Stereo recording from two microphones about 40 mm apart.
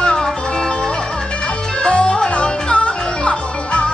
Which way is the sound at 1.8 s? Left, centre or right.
Left.